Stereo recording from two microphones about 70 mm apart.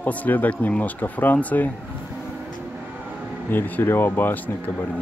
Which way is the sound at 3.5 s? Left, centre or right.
Left.